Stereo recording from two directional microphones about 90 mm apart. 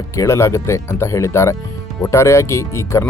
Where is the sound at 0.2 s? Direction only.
30° left (ahead or behind).